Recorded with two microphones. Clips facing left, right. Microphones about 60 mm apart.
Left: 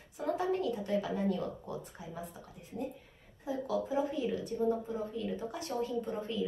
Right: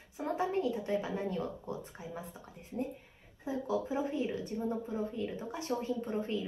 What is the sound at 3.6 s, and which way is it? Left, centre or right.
A woman's voice, right.